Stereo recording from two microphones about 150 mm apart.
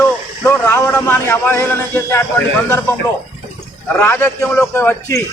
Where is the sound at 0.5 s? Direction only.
10° left (ahead or behind).